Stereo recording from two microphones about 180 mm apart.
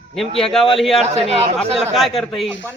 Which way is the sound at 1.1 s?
35° right (ahead or behind).